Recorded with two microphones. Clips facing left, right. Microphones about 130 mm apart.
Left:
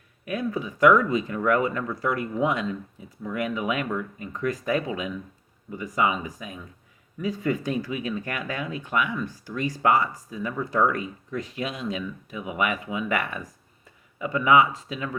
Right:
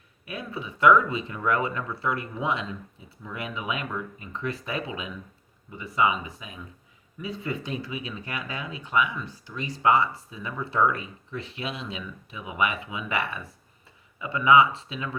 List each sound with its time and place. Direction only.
0.3 s speech: 45° left (ahead or behind)